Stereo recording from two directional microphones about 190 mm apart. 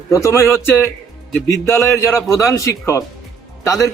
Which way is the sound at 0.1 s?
15° left (ahead or behind).